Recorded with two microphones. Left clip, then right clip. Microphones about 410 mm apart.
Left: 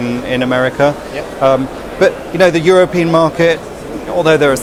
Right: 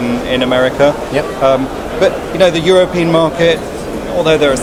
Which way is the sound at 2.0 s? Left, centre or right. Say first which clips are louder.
Even; left.